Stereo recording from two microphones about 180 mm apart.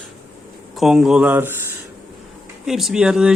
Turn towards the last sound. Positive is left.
turn(degrees=-5)  # may be behind; listen again after turning